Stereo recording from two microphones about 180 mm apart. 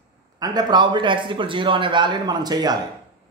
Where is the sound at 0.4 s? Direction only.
25° right (ahead or behind).